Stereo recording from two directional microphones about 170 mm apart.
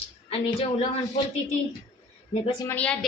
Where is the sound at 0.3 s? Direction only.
35° left (ahead or behind).